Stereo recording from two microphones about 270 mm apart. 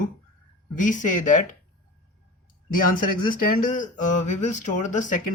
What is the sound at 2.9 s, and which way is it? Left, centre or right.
Speech, left.